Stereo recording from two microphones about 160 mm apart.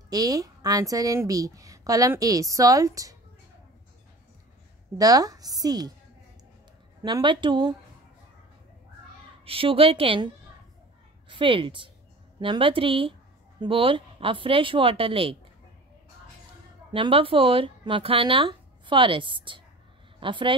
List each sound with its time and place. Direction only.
0.1 s a woman's voice: 25° right (ahead or behind)
4.9 s a woman's voice: 25° right (ahead or behind)
7.0 s a woman's voice: 25° right (ahead or behind)
9.4 s speech: 35° right (ahead or behind)
16.9 s speech: 35° right (ahead or behind)